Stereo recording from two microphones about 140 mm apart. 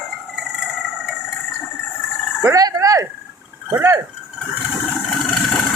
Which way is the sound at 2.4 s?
25° right (ahead or behind).